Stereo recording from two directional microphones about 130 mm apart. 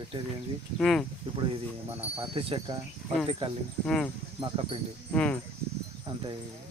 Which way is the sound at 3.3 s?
40° right (ahead or behind).